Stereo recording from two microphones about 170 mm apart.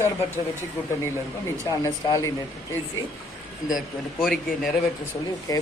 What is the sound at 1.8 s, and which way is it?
Speech, 20° left (ahead or behind).